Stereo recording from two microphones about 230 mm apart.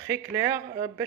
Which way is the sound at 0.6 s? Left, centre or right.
Right.